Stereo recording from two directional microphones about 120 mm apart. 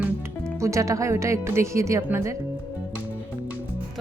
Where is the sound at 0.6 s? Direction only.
25° right (ahead or behind).